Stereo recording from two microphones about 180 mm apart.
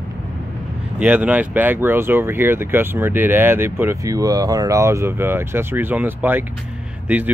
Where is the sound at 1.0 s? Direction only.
10° right (ahead or behind).